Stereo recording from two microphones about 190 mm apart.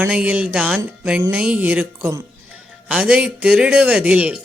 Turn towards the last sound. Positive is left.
turn(degrees=-5)  # may be behind; listen again after turning